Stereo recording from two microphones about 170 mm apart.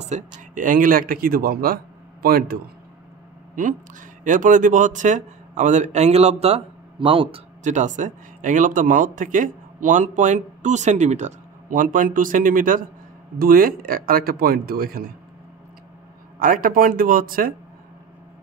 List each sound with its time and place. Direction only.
0.1 s speech: 40° right (ahead or behind)
0.6 s speech: 50° right (ahead or behind)
3.6 s a man's voice: 50° right (ahead or behind); by 7.4 s 30° right (ahead or behind)
7.6 s a man's voice: 45° right (ahead or behind)
16.3 s speech: 55° right (ahead or behind)